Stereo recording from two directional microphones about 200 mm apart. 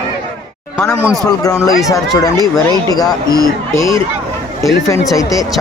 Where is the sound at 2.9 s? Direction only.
20° left (ahead or behind).